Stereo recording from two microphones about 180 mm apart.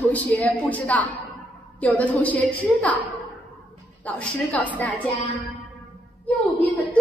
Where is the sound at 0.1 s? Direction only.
10° left (ahead or behind).